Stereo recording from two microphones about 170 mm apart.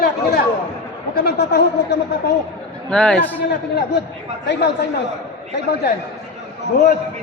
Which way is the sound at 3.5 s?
90° left.